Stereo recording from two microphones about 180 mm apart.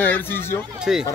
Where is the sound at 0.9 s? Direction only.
5° right (ahead or behind).